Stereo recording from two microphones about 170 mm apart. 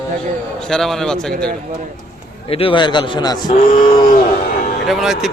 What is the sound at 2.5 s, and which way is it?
Speech, 35° left (ahead or behind).